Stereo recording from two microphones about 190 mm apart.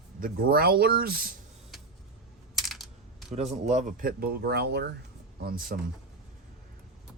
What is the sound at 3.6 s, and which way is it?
Speech, 40° right (ahead or behind).